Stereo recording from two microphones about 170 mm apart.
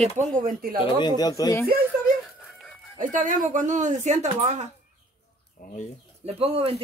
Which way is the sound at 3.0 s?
50° right (ahead or behind).